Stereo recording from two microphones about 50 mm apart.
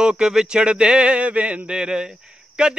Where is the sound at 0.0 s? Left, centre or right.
Centre.